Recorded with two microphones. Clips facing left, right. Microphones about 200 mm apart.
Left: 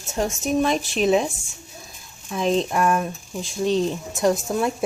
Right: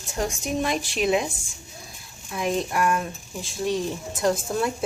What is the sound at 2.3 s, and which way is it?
A woman's voice, 25° left (ahead or behind).